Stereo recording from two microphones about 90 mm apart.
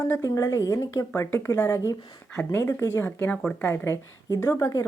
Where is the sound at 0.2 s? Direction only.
40° left (ahead or behind).